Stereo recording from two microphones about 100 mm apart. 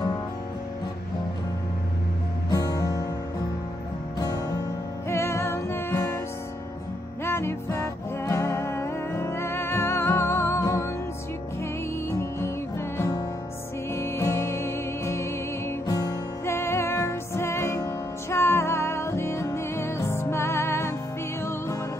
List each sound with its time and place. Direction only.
2.5 s music: 35° left (ahead or behind)
5.1 s music: 25° left (ahead or behind)
7.2 s music: 25° left (ahead or behind)
12.1 s music: 30° left (ahead or behind)
15.9 s music: 40° left (ahead or behind)
16.4 s music: 25° left (ahead or behind)